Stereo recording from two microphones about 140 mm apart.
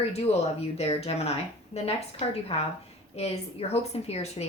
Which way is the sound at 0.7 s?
50° left (ahead or behind).